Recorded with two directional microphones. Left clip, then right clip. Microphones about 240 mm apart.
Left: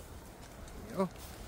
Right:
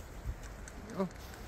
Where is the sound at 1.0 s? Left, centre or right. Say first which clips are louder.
Left 3 dB; left.